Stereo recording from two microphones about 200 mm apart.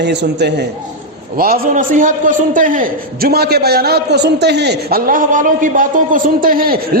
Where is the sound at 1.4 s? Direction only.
45° right (ahead or behind).